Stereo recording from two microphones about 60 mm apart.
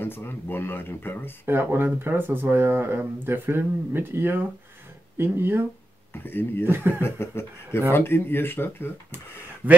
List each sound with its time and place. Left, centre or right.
0.0 s speech: left
1.4 s speech: right
6.1 s speech: left
6.6 s speech: right
7.0 s speech: left
9.6 s a man's voice: right